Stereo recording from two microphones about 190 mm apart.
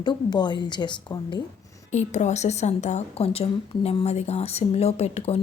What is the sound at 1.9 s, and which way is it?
A woman's voice, 40° left (ahead or behind).